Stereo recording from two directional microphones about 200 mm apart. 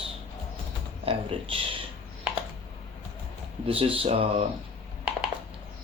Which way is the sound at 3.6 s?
30° right (ahead or behind).